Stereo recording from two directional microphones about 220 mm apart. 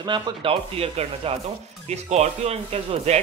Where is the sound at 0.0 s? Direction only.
20° right (ahead or behind).